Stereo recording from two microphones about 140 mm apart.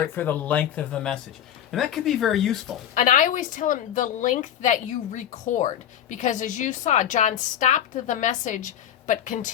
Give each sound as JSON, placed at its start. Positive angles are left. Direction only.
{"t": 0.1, "sound": "speech", "side_deg": 15}
{"t": 2.9, "sound": "a woman's voice", "side_deg": 70}